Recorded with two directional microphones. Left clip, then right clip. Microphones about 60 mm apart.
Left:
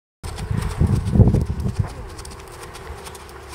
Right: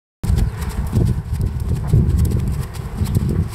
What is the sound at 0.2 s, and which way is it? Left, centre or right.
Horse, centre.